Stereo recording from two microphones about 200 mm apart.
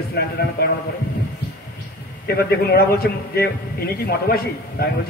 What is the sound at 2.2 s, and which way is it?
A man's voice, 50° left (ahead or behind).